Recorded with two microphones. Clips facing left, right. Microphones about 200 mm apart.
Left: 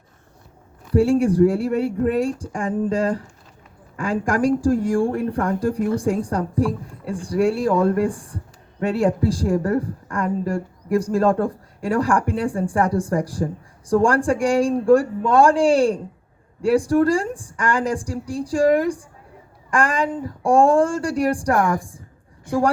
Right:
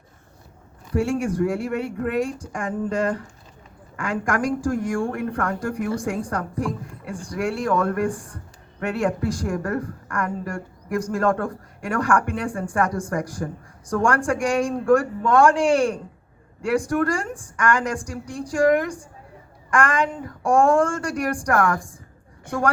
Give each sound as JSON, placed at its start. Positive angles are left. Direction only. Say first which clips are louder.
{"t": 0.9, "sound": "a woman's voice", "louder": "left 6 dB", "side_deg": 35}
{"t": 21.5, "sound": "a woman's voice", "louder": "left 1 dB", "side_deg": 15}